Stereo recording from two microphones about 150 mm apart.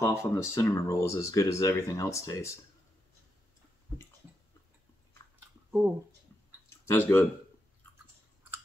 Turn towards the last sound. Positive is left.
turn(degrees=15)  # may be behind; listen again after turning